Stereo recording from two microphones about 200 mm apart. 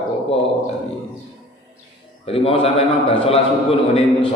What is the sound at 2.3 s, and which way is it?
Mantra, 30° left (ahead or behind).